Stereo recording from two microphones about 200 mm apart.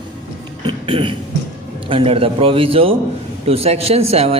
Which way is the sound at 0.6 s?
25° right (ahead or behind).